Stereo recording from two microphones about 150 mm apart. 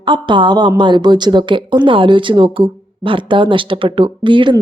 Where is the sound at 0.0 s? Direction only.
35° right (ahead or behind).